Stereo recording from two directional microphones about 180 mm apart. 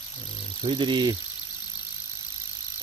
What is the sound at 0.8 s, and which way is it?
Speech, 25° right (ahead or behind).